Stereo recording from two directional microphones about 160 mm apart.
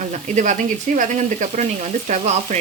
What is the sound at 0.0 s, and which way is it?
Speech, 50° right (ahead or behind).